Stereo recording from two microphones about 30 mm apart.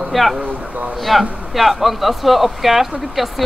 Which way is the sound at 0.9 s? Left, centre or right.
Centre.